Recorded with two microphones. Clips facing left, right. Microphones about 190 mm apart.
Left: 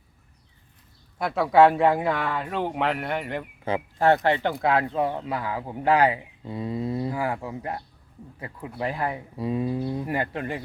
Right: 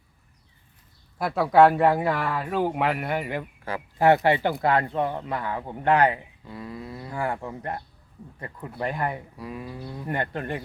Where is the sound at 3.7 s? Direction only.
20° left (ahead or behind).